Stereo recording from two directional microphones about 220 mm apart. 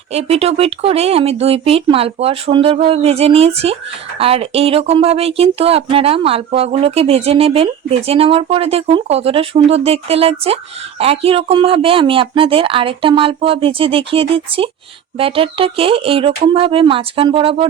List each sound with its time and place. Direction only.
0.1 s speech: 30° right (ahead or behind)